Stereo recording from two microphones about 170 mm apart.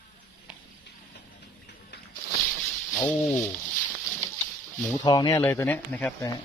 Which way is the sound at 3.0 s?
15° left (ahead or behind).